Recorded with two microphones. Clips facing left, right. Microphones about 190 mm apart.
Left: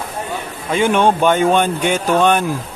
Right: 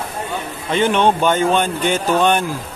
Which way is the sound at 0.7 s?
10° left (ahead or behind).